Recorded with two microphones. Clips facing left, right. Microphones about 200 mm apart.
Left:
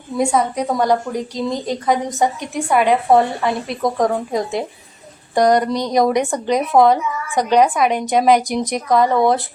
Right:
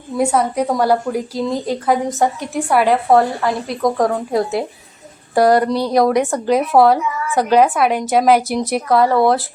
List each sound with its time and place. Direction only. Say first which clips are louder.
0.2 s a woman's voice: right 1 dB; 5° right (ahead or behind)